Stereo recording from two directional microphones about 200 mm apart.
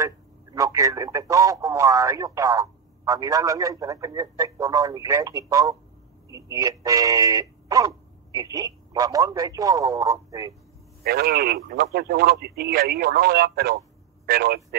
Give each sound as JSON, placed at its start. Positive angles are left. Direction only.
{"t": 0.0, "sound": "speech", "side_deg": -15}
{"t": 11.1, "sound": "a man's voice", "side_deg": -50}